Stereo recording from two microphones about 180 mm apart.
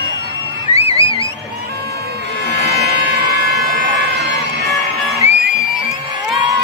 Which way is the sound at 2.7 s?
65° right (ahead or behind).